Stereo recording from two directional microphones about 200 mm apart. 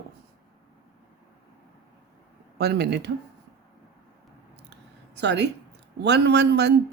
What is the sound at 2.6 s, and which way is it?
Speech, 55° right (ahead or behind).